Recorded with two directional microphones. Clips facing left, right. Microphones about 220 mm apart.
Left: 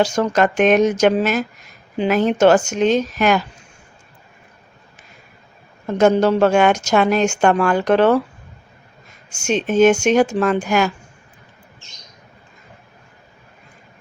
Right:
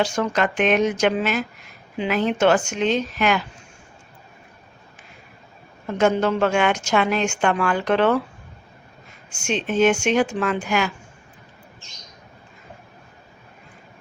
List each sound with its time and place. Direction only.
0.0 s speech: 40° left (ahead or behind)
6.0 s speech: 40° left (ahead or behind)
9.3 s speech: 45° left (ahead or behind)